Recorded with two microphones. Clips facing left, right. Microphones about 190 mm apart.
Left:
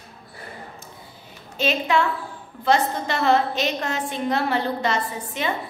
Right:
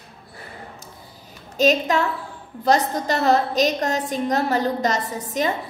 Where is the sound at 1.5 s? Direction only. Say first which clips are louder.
Right 3 dB; 40° right (ahead or behind).